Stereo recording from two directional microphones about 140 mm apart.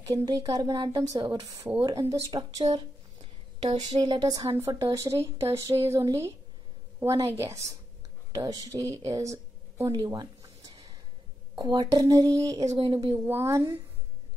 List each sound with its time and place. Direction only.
0.0 s speech: 25° right (ahead or behind)
2.6 s a sound: 45° right (ahead or behind)
3.6 s speech: 30° right (ahead or behind)
9.1 s a sound: 20° right (ahead or behind)
11.5 s speech: 30° right (ahead or behind)
12.6 s speech: 45° right (ahead or behind)